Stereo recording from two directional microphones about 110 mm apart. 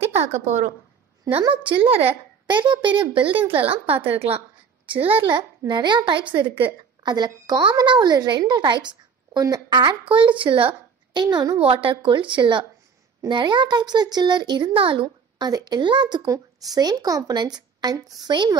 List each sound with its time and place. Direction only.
0.1 s a woman's voice: 80° right
1.3 s a child's voice: 30° right (ahead or behind)
1.7 s speech: 55° right (ahead or behind)
2.5 s a woman's voice: 45° right (ahead or behind)
5.7 s a woman's voice: 45° right (ahead or behind)
11.2 s a child's voice: 40° right (ahead or behind)
11.6 s a woman's voice: 55° right (ahead or behind)
16.3 s a child's voice: 35° right (ahead or behind)